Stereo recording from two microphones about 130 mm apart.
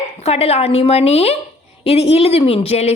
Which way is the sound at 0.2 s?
55° left (ahead or behind).